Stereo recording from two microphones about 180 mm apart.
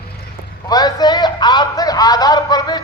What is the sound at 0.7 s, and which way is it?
A man's voice, 20° left (ahead or behind).